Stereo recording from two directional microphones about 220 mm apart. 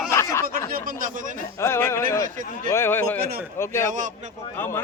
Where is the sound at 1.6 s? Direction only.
10° left (ahead or behind).